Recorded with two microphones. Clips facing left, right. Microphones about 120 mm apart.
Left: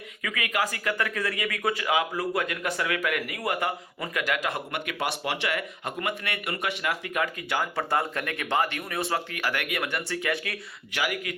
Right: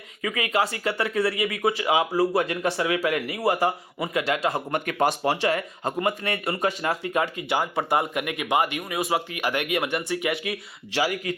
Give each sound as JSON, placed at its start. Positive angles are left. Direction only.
{"t": 0.2, "sound": "speech", "side_deg": -30}